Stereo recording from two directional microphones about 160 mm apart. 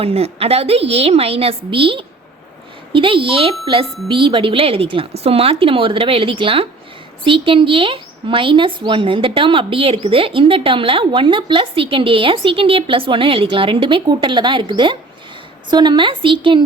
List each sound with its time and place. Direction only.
0.0 s a woman's voice: 40° right (ahead or behind)